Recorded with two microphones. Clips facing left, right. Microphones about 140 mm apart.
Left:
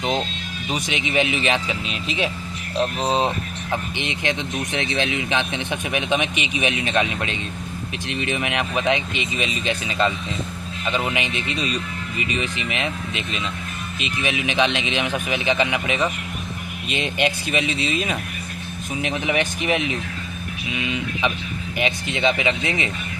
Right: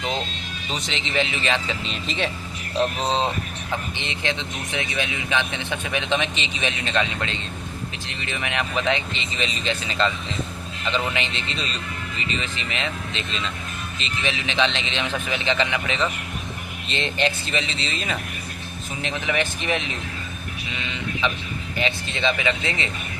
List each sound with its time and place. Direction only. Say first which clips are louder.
0.7 s speech: left 4 dB; 15° left (ahead or behind)
3.2 s speech: left 2 dB; 15° left (ahead or behind)